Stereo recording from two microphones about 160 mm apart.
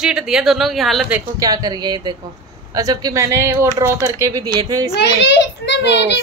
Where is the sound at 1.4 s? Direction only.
25° right (ahead or behind).